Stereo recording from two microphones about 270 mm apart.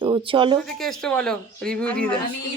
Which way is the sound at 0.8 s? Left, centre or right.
Centre.